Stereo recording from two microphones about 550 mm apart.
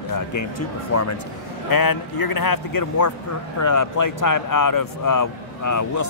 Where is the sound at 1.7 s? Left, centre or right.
Left.